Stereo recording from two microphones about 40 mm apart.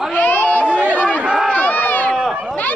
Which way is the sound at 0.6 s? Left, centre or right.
Right.